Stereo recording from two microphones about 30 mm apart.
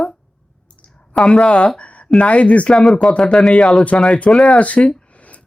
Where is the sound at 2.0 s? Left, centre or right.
Left.